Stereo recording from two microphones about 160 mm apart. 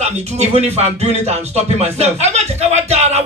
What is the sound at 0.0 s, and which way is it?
Music, 45° right (ahead or behind).